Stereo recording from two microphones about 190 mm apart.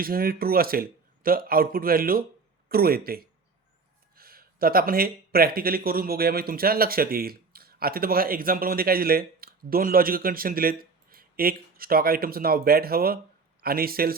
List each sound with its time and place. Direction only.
0.0 s speech: 50° right (ahead or behind)